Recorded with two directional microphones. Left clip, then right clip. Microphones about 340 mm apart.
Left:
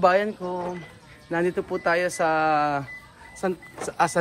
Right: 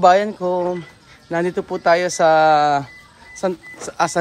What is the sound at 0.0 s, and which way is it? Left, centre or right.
Speech, centre.